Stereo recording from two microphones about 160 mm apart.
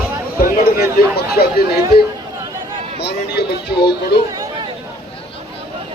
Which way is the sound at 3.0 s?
90° left.